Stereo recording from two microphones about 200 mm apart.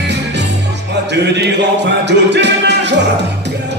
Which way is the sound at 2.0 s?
60° right (ahead or behind).